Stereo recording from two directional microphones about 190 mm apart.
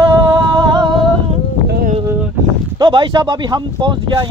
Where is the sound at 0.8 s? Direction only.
25° right (ahead or behind).